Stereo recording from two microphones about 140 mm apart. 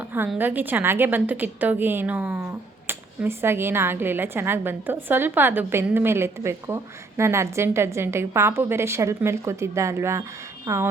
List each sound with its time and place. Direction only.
0.3 s a woman's voice: 15° right (ahead or behind)